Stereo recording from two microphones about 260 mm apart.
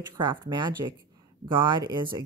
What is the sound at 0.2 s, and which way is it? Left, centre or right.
Speech, centre.